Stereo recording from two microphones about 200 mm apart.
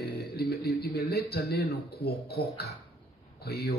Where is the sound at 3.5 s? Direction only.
50° left (ahead or behind).